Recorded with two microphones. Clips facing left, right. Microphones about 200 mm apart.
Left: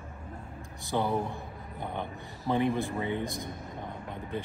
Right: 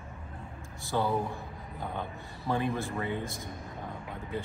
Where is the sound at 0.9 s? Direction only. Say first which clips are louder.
Even; 20° left (ahead or behind).